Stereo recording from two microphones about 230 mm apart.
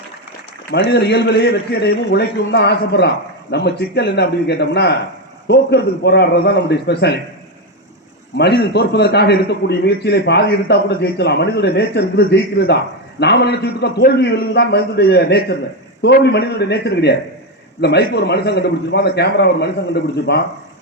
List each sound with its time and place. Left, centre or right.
0.7 s a man's voice: left
8.4 s a man's voice: left